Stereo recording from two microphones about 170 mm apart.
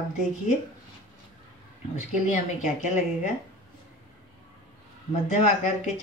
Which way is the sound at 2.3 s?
45° left (ahead or behind).